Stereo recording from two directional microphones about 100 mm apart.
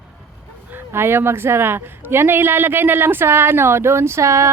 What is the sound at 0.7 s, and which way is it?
Speech, 20° right (ahead or behind).